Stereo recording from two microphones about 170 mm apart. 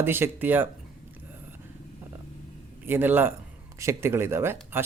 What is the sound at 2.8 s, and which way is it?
Speech, 10° right (ahead or behind).